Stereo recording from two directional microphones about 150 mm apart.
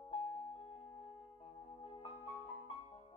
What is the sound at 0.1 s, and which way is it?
Music, 40° left (ahead or behind).